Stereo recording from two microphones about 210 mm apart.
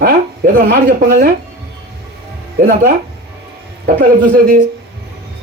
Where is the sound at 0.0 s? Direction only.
45° right (ahead or behind).